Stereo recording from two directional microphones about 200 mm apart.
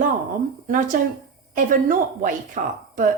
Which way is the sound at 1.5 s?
40° right (ahead or behind).